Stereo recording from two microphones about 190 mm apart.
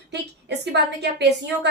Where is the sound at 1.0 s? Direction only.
60° right (ahead or behind).